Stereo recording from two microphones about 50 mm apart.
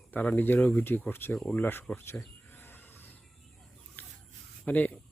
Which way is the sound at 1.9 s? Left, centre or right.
Left.